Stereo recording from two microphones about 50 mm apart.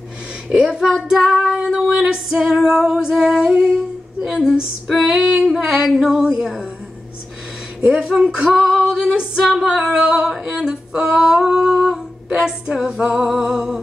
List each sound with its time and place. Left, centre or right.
0.5 s a woman's voice: centre
1.2 s female singing: centre
2.0 s music: centre
4.8 s female singing: centre
5.6 s a sound: centre
7.9 s speech: right
8.3 s female singing: centre
9.4 s singing: centre
11.3 s humming: centre
12.4 s music: centre